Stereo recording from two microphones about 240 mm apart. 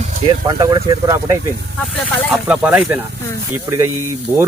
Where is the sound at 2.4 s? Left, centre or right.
Centre.